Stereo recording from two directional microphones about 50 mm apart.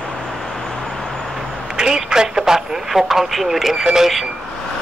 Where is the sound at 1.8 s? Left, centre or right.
Centre.